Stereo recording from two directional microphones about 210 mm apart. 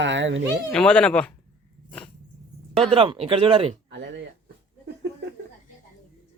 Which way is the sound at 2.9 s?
25° right (ahead or behind).